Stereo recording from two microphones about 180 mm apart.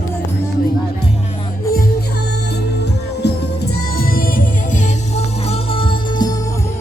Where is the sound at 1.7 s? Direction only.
60° left (ahead or behind).